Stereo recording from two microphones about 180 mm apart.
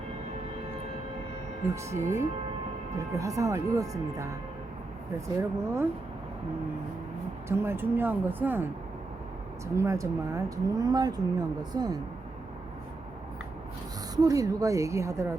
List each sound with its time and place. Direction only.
1.6 s speech: 15° right (ahead or behind)
5.4 s speech: 15° right (ahead or behind)
7.4 s speech: 15° right (ahead or behind)
9.7 s speech: 15° right (ahead or behind)
14.2 s speech: 20° right (ahead or behind)